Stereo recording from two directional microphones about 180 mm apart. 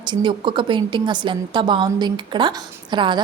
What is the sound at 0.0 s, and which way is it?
A woman's voice, 25° right (ahead or behind).